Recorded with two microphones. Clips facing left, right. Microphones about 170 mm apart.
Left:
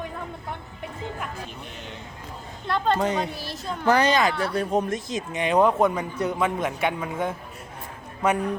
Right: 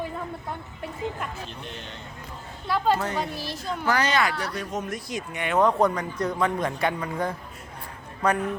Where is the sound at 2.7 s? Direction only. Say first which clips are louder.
Left 1 dB; 5° right (ahead or behind).